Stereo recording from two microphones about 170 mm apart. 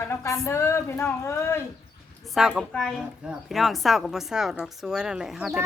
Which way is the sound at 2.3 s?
5° right (ahead or behind).